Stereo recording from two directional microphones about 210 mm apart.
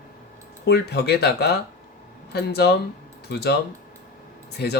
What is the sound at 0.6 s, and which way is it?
Speech, 50° left (ahead or behind).